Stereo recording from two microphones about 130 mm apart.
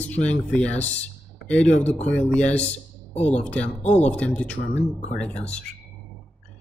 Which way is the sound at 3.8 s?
60° left (ahead or behind).